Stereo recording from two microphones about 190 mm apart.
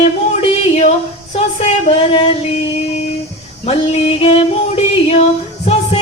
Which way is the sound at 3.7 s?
30° left (ahead or behind).